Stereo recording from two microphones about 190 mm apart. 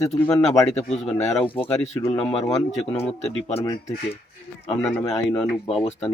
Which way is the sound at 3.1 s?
30° left (ahead or behind).